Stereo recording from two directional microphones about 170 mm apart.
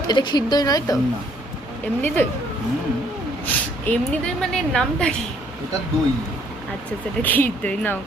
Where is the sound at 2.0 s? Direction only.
10° left (ahead or behind).